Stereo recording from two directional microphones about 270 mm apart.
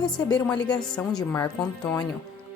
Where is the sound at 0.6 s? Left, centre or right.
Centre.